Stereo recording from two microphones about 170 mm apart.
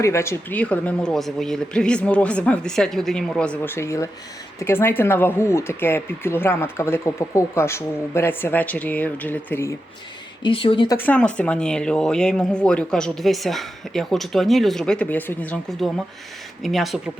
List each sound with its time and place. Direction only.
0.0 s speech: 15° left (ahead or behind)
10.4 s speech: 30° left (ahead or behind)
10.8 s speech: 10° left (ahead or behind)